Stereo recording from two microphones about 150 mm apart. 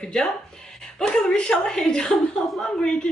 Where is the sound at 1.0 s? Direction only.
5° left (ahead or behind).